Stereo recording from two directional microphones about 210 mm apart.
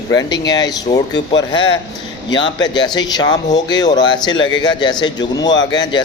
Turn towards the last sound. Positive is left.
turn(degrees=20)  # may be behind; listen again after turning